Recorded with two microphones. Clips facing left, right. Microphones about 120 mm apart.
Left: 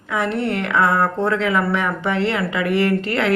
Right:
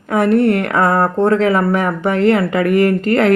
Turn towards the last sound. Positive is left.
turn(degrees=-45)  # may be behind; listen again after turning